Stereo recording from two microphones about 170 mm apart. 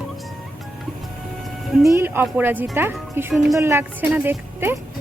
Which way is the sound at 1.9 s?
15° right (ahead or behind).